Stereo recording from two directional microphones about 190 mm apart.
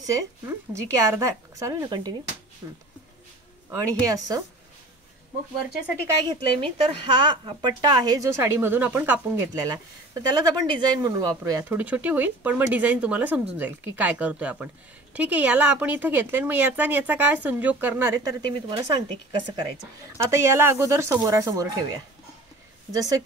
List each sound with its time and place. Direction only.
0.8 s speech: 15° right (ahead or behind)
3.7 s speech: 15° right (ahead or behind)
6.2 s speech: 25° right (ahead or behind)